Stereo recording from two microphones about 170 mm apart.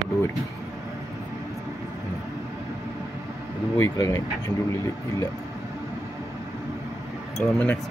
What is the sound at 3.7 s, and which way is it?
Speech, 20° left (ahead or behind).